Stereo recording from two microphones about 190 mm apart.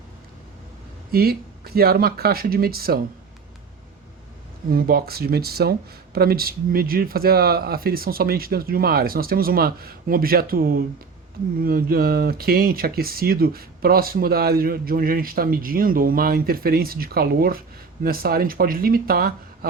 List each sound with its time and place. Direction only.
1.1 s speech: 55° right (ahead or behind)
4.7 s speech: 55° right (ahead or behind)